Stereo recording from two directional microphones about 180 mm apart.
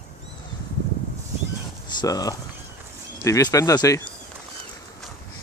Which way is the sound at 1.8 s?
20° left (ahead or behind).